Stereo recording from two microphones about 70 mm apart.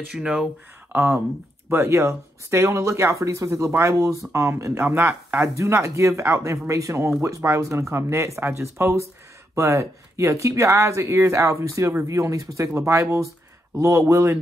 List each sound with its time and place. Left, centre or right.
0.1 s speech: centre
0.9 s speech: right
4.8 s speech: right